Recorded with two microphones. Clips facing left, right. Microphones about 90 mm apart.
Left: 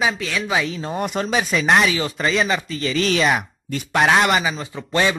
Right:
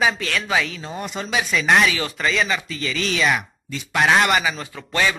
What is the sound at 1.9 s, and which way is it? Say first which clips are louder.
Speech: left 3 dB; 25° left (ahead or behind).